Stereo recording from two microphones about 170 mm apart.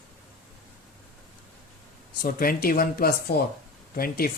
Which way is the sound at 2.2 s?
60° left (ahead or behind).